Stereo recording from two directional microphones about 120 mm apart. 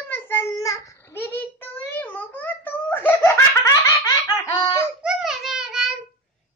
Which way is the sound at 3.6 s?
30° left (ahead or behind).